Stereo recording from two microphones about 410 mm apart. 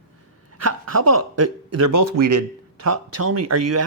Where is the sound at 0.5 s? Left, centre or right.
Right.